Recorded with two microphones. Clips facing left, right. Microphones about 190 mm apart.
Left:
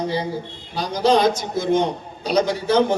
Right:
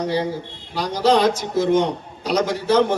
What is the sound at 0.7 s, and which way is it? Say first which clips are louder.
A man's voice: even; 80° right.